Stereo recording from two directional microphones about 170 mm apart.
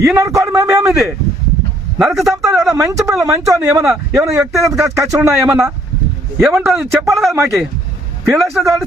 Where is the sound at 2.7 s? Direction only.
20° right (ahead or behind).